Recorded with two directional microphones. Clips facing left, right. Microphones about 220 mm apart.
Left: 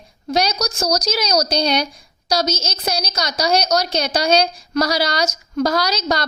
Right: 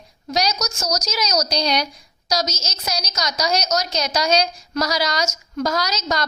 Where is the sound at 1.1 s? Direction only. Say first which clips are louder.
Left 3 dB; 30° left (ahead or behind).